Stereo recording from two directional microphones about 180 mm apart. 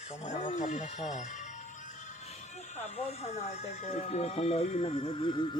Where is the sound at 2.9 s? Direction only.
35° left (ahead or behind).